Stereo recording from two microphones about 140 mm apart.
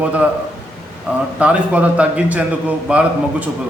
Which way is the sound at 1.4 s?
10° right (ahead or behind).